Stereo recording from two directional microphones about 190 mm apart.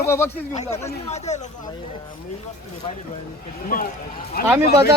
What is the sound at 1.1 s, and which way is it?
Speech, 35° left (ahead or behind).